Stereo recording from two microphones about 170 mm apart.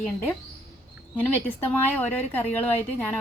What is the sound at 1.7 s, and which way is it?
A woman's voice, 10° left (ahead or behind).